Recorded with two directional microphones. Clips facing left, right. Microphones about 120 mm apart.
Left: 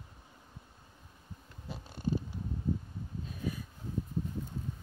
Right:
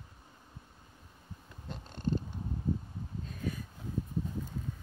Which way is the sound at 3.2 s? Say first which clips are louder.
Even; 10° left (ahead or behind).